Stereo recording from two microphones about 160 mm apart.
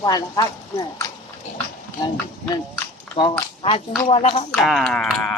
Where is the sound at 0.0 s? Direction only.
25° left (ahead or behind).